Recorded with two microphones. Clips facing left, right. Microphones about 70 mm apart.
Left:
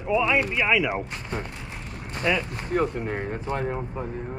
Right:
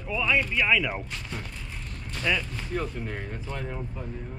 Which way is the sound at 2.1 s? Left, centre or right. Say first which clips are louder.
Left 3 dB; left.